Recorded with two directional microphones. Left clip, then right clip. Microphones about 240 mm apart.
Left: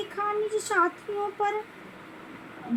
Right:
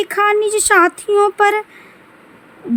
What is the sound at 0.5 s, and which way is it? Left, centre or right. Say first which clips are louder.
Speech: right 13 dB; right.